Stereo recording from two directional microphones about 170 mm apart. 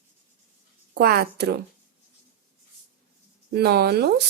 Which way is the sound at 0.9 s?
65° right (ahead or behind).